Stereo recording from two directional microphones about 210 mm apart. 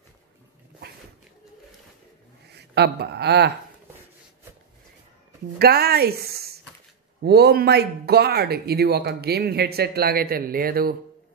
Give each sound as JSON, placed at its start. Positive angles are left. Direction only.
{"t": 2.4, "sound": "speech", "side_deg": -50}
{"t": 5.6, "sound": "speech", "side_deg": -50}